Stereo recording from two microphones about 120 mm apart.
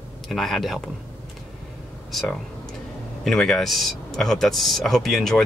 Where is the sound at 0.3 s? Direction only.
Centre (ahead or behind).